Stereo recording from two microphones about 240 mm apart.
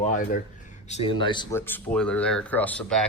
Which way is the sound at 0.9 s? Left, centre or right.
Left.